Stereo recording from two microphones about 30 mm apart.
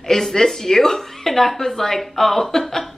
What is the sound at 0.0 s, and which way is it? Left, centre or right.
Speech, centre.